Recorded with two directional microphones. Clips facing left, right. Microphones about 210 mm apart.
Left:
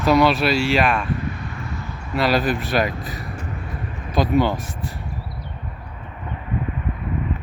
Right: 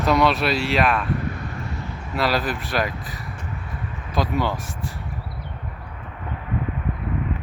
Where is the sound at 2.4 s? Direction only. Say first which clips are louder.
Left 4 dB; 25° left (ahead or behind).